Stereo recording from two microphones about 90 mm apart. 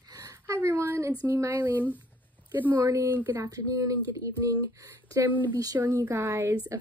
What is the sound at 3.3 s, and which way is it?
A woman's voice, 40° right (ahead or behind).